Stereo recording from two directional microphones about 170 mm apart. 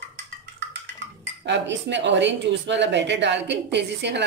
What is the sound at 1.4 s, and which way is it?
Speech, 90° right.